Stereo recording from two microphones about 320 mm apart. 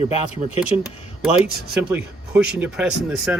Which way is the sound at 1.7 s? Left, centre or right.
Centre.